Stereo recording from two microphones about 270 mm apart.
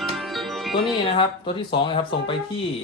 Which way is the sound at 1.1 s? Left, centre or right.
Centre.